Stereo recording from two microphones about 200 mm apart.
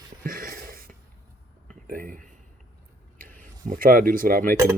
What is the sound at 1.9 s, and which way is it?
Speech, 45° right (ahead or behind).